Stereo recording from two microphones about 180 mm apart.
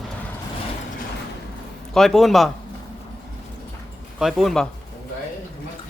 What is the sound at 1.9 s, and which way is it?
Speech, centre (ahead or behind).